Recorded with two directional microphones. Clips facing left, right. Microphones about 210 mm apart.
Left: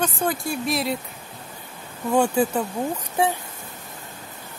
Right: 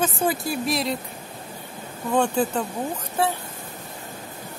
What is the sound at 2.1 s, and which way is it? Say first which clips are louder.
Speech: left 2 dB; 10° left (ahead or behind).